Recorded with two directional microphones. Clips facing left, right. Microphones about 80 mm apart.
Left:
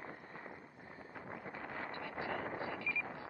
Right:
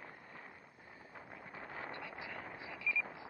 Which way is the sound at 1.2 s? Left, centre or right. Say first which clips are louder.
Left 4 dB; left.